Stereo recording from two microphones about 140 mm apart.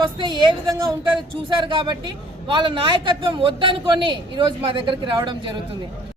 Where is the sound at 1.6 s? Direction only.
35° right (ahead or behind).